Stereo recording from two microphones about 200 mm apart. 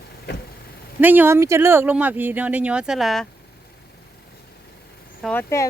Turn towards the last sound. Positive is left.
turn(degrees=5)  # may be behind; listen again after turning